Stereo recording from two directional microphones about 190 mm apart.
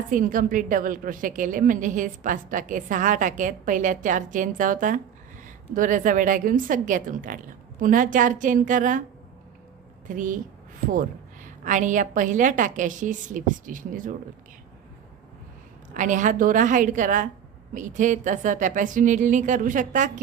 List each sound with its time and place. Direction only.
0.1 s a woman's voice: 45° right (ahead or behind)
10.1 s a woman's voice: 45° right (ahead or behind)
11.4 s a woman's voice: 40° right (ahead or behind)
16.0 s speech: 40° right (ahead or behind)